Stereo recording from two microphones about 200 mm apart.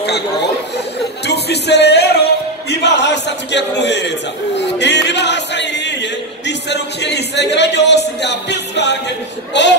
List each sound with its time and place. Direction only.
1.2 s speech: 55° left (ahead or behind)
4.6 s music: 60° left (ahead or behind)
6.4 s speech: 60° left (ahead or behind)